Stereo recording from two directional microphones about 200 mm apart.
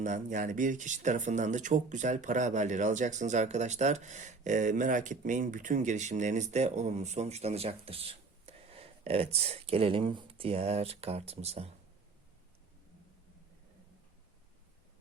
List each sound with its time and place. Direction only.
0.0 s speech: 40° right (ahead or behind)